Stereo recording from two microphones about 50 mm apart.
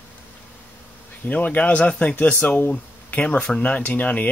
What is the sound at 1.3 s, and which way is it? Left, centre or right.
Speech, left.